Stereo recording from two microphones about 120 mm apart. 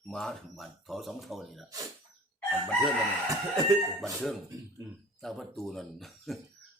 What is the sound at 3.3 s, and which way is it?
Chicken, 30° right (ahead or behind).